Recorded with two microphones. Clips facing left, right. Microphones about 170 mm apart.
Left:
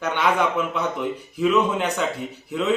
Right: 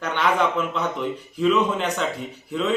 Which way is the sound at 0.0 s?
5° left (ahead or behind).